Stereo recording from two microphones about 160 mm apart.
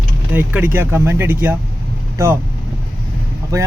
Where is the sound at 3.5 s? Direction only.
20° right (ahead or behind).